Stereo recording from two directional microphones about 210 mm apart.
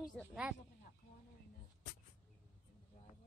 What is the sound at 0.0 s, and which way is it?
Speech, 5° right (ahead or behind).